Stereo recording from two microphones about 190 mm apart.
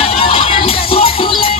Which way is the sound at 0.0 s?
30° left (ahead or behind).